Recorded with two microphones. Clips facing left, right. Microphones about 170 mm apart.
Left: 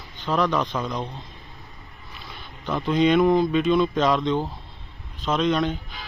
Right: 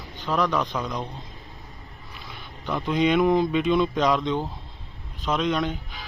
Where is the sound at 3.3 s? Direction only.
15° right (ahead or behind).